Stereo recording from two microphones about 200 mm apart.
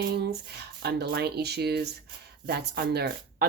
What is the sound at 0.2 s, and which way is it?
Speech, 55° right (ahead or behind).